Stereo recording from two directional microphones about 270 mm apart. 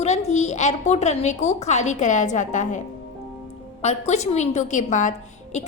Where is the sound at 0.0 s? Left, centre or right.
Left.